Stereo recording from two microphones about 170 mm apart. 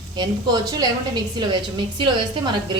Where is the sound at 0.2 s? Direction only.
20° right (ahead or behind).